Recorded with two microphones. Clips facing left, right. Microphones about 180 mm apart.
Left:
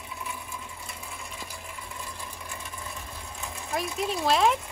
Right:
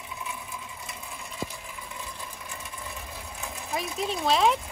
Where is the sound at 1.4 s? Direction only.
20° right (ahead or behind).